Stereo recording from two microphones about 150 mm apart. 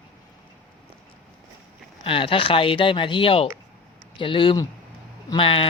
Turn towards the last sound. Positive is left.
turn(degrees=35)  # may be behind; listen again after turning